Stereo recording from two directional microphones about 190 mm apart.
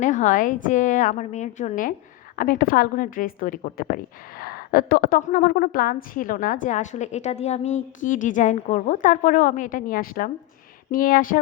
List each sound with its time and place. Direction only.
0.0 s a woman's voice: 40° left (ahead or behind)